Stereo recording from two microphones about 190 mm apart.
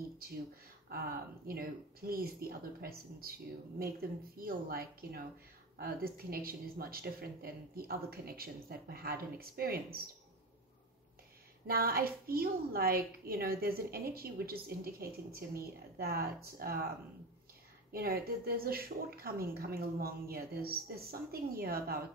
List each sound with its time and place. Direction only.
0.8 s a woman's voice: 55° right (ahead or behind)
4.4 s a woman's voice: 50° right (ahead or behind)
11.6 s a woman's voice: 50° right (ahead or behind)
17.9 s a woman's voice: 50° right (ahead or behind)